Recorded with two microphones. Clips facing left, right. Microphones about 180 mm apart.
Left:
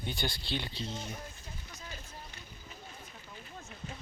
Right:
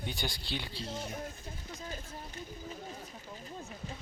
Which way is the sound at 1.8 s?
45° right (ahead or behind).